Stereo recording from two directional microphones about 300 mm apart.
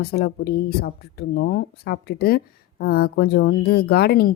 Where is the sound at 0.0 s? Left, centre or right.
Left.